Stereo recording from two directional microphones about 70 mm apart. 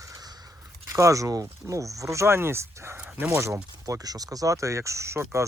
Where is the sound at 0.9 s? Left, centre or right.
Right.